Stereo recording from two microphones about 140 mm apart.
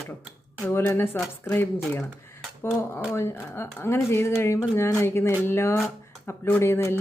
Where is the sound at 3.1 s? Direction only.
20° left (ahead or behind).